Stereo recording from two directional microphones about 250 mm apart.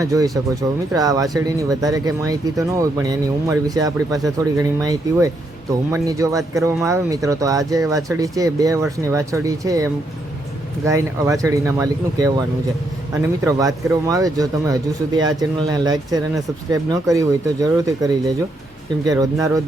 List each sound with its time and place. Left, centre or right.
0.0 s speech: centre
13.4 s speech: centre